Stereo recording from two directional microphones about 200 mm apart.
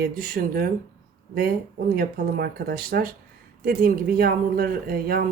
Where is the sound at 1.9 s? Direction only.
50° right (ahead or behind).